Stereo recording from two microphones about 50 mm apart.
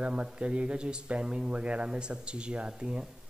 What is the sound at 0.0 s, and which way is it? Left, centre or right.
Speech, right.